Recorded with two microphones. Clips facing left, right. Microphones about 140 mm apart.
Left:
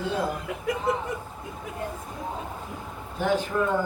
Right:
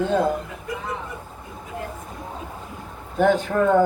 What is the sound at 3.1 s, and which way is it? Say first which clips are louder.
Speech: right 6 dB; 60° right (ahead or behind).